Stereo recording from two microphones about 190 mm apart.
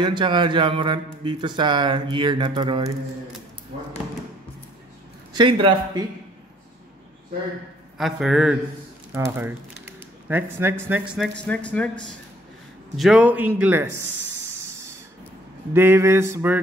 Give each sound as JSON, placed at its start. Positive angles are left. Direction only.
{"t": 0.0, "sound": "speech", "side_deg": -25}
{"t": 5.3, "sound": "speech", "side_deg": -25}
{"t": 8.0, "sound": "a man's voice", "side_deg": 0}
{"t": 9.8, "sound": "a sound", "side_deg": -10}
{"t": 11.1, "sound": "speech", "side_deg": 5}
{"t": 12.9, "sound": "a man's voice", "side_deg": 0}
{"t": 15.7, "sound": "a man's voice", "side_deg": -10}